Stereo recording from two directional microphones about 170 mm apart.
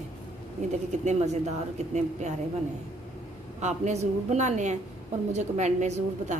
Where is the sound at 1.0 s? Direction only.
40° right (ahead or behind).